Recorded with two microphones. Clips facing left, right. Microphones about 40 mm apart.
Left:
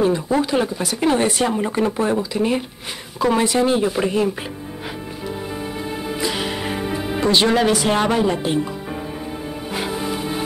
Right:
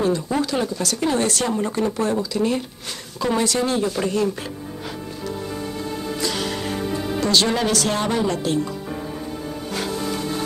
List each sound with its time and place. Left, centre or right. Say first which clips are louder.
0.0 s speech: left 3 dB; left
5.9 s music: left 2 dB; centre
9.7 s music: left 2 dB; centre